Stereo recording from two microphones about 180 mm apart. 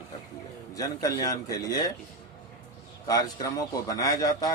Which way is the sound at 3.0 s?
20° left (ahead or behind).